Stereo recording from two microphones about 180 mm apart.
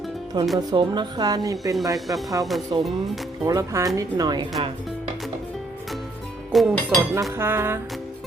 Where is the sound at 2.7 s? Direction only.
30° right (ahead or behind).